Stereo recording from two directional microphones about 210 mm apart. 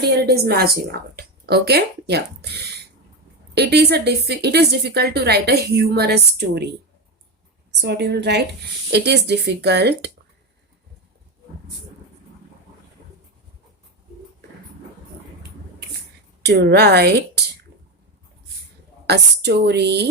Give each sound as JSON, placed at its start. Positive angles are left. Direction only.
{"t": 0.0, "sound": "a woman's voice", "side_deg": -50}
{"t": 7.8, "sound": "a woman's voice", "side_deg": -55}
{"t": 16.4, "sound": "a woman's voice", "side_deg": -50}
{"t": 19.0, "sound": "a woman's voice", "side_deg": -50}